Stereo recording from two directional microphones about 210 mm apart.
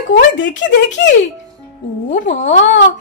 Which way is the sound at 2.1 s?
35° left (ahead or behind).